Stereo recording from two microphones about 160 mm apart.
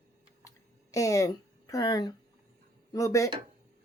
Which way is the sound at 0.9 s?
20° left (ahead or behind).